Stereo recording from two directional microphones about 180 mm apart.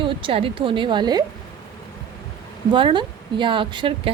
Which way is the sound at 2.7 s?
25° right (ahead or behind).